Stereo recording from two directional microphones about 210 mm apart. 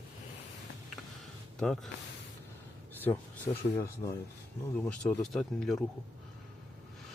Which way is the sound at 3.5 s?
20° left (ahead or behind).